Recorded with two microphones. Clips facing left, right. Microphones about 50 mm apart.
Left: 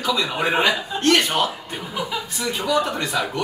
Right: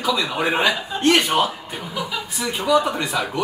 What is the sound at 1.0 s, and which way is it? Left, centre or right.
Speech, centre.